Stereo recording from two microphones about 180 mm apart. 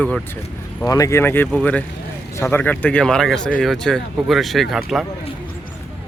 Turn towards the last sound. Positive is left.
turn(degrees=0)  # may be behind; listen again after turning